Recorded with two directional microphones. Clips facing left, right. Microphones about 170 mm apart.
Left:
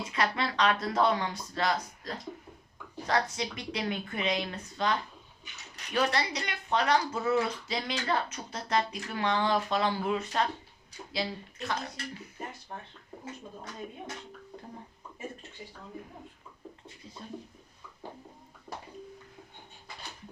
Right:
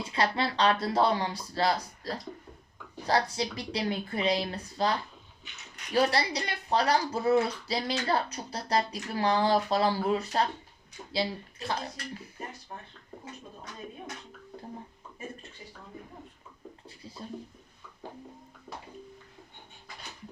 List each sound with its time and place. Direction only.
0.0 s speech: 30° right (ahead or behind)
16.8 s speech: 35° right (ahead or behind)